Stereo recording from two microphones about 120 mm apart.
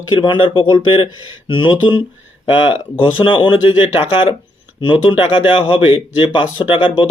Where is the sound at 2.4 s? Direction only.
45° left (ahead or behind).